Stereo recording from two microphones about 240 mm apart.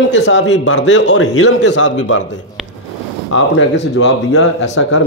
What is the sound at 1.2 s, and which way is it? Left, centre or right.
Speech, left.